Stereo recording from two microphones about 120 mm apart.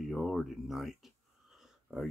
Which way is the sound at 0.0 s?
Centre (ahead or behind).